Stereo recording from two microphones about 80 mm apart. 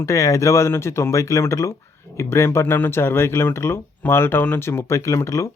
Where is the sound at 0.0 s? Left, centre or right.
Left.